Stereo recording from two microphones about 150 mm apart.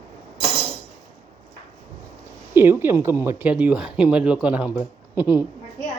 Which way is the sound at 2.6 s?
15° right (ahead or behind).